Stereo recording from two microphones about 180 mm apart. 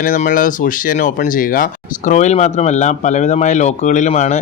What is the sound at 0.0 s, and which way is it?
Speech, 45° left (ahead or behind).